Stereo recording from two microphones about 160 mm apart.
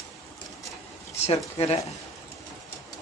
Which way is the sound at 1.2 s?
40° left (ahead or behind).